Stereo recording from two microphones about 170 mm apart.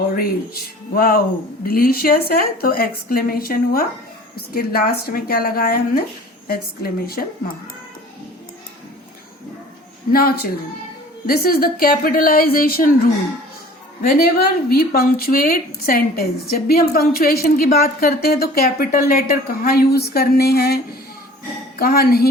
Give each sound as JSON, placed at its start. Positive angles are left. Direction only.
{"t": 0.2, "sound": "speech", "side_deg": 60}
{"t": 10.1, "sound": "speech", "side_deg": 60}
{"t": 21.8, "sound": "speech", "side_deg": 65}